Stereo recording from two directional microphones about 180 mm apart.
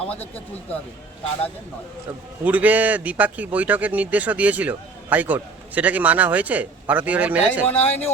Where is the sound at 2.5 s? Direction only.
10° right (ahead or behind).